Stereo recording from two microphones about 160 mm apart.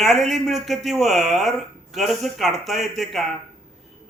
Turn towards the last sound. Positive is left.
turn(degrees=0)  # may be behind; listen again after turning